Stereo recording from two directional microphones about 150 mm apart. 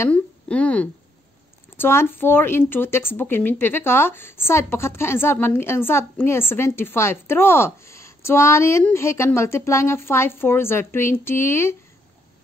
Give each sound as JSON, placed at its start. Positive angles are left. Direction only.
{"t": 0.0, "sound": "speech", "side_deg": 10}